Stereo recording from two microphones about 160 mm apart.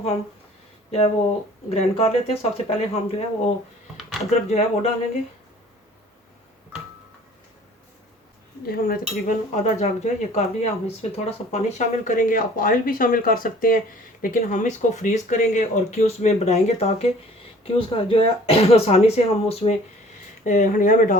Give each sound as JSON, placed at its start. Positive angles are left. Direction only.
{"t": 0.9, "sound": "speech", "side_deg": 40}
{"t": 4.4, "sound": "speech", "side_deg": 45}
{"t": 8.6, "sound": "speech", "side_deg": 65}
{"t": 20.4, "sound": "speech", "side_deg": 55}